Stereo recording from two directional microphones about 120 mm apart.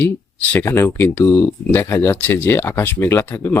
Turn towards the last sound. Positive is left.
turn(degrees=20)  # may be behind; listen again after turning